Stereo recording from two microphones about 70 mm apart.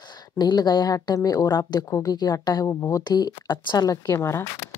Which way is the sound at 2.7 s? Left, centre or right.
Left.